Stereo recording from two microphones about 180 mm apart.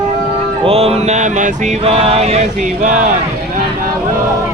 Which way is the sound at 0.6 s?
35° right (ahead or behind).